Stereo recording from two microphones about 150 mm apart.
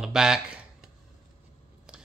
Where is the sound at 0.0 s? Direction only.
5° right (ahead or behind).